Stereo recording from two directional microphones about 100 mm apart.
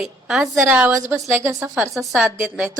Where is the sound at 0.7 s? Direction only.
15° right (ahead or behind).